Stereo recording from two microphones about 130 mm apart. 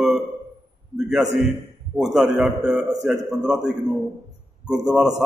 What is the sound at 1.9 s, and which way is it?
A man's voice, 5° right (ahead or behind).